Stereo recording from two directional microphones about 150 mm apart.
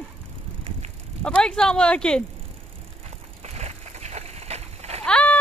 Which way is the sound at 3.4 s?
45° right (ahead or behind).